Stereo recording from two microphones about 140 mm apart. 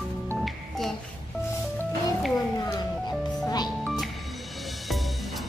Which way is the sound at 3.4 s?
30° left (ahead or behind).